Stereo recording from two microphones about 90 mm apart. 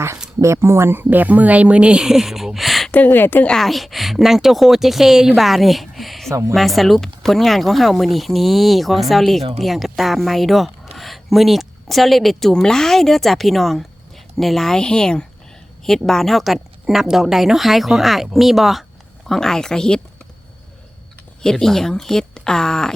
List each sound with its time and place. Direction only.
0.3 s speech: 30° right (ahead or behind); by 2.9 s centre (ahead or behind)
2.9 s speech: 20° left (ahead or behind)
3.5 s a woman's voice: centre (ahead or behind)
21.4 s speech: 5° left (ahead or behind)